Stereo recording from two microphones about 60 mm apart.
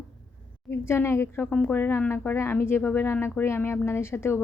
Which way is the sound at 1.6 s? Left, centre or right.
Left.